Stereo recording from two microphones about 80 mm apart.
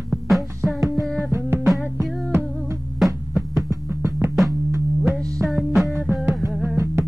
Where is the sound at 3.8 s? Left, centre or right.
Right.